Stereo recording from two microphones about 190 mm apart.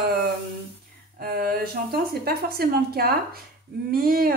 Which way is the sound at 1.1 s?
50° right (ahead or behind).